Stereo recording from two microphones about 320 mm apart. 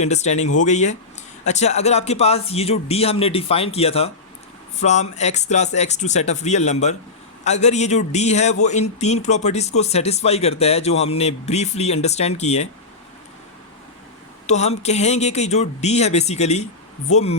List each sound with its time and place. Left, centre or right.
0.0 s speech: left
14.4 s speech: left